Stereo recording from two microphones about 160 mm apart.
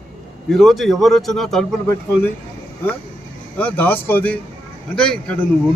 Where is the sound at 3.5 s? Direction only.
10° left (ahead or behind).